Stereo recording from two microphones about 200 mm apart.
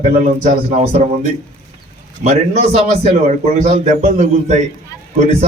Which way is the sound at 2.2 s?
35° right (ahead or behind).